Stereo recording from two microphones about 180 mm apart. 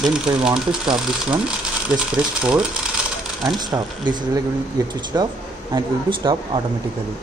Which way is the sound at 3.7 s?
20° right (ahead or behind).